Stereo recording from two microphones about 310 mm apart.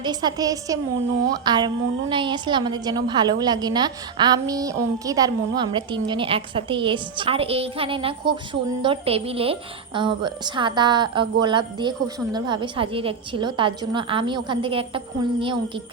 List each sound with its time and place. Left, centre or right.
0.0 s a woman's voice: centre